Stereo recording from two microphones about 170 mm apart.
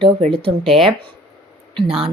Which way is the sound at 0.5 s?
25° right (ahead or behind).